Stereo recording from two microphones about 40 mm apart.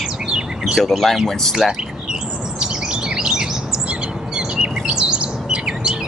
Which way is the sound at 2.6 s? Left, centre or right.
Centre.